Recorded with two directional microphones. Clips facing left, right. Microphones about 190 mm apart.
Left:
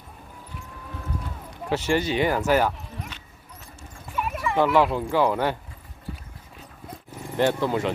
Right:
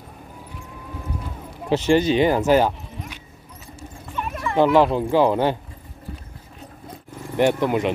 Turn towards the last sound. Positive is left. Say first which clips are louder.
# right 4 dB
turn(degrees=-15)  # may be behind; listen again after turning